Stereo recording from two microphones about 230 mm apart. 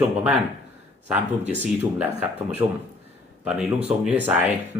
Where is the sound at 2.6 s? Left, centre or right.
Centre.